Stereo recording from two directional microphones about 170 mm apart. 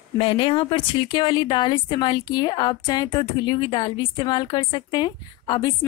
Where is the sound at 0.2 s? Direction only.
30° left (ahead or behind).